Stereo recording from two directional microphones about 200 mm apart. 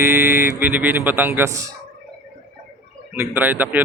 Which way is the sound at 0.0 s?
10° right (ahead or behind).